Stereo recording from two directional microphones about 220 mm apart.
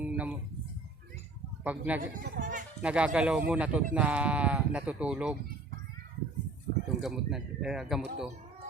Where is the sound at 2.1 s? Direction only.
40° right (ahead or behind).